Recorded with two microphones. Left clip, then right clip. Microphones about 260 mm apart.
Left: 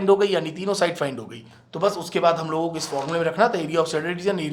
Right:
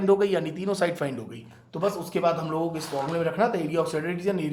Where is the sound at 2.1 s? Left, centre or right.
Left.